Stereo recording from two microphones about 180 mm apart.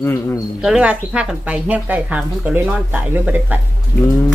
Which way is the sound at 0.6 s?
5° right (ahead or behind).